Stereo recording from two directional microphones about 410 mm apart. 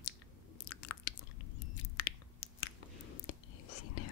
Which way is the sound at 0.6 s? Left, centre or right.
Left.